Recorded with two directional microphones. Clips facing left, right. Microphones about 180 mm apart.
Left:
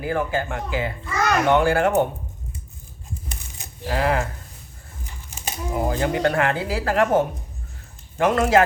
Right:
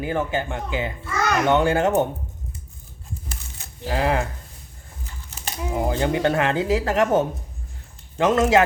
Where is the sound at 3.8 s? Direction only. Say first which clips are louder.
Even; 25° right (ahead or behind).